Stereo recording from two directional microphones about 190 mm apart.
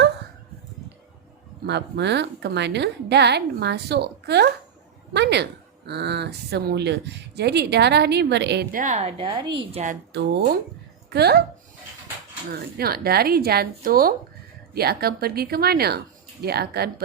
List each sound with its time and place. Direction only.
1.6 s speech: 65° right (ahead or behind)
8.7 s a woman's voice: 40° right (ahead or behind); by 9.6 s 25° right (ahead or behind)
9.7 s a woman's voice: 40° right (ahead or behind)
11.1 s speech: 60° right (ahead or behind)
12.5 s speech: 55° right (ahead or behind)